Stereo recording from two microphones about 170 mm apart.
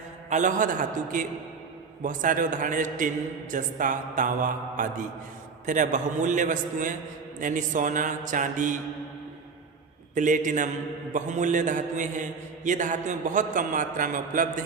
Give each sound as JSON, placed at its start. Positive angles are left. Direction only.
{"t": 0.3, "sound": "a man's voice", "side_deg": -45}
{"t": 10.2, "sound": "a man's voice", "side_deg": -50}